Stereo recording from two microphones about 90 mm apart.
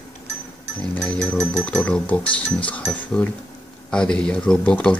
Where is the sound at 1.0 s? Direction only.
10° left (ahead or behind).